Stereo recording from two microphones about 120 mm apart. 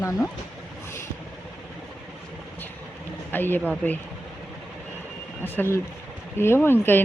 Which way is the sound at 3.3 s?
15° left (ahead or behind).